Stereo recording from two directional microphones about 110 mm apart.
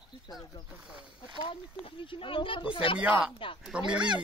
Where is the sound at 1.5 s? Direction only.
50° left (ahead or behind).